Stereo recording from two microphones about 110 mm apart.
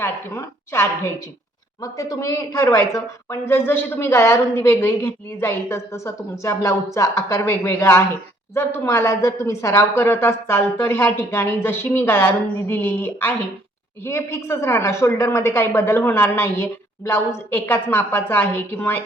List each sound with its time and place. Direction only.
0.0 s a woman's voice: 25° left (ahead or behind)